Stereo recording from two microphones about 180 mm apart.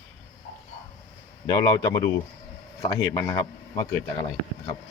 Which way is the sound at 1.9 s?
15° left (ahead or behind).